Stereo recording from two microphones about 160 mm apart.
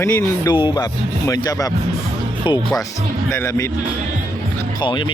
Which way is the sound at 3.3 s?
15° left (ahead or behind).